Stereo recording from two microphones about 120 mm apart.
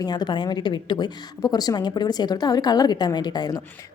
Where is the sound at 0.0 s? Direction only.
35° left (ahead or behind).